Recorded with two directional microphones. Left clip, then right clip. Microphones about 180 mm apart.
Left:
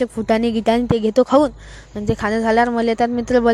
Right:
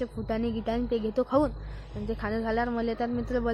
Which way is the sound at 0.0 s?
45° left (ahead or behind).